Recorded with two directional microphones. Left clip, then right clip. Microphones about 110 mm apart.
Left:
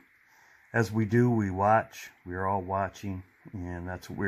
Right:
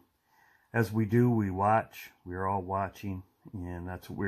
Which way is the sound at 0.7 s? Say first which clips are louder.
Left 2 dB; 10° left (ahead or behind).